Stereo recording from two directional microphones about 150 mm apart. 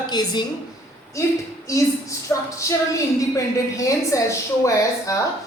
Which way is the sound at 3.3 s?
20° left (ahead or behind).